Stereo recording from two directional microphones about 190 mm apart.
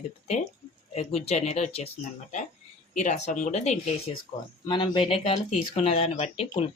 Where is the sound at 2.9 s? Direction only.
40° left (ahead or behind).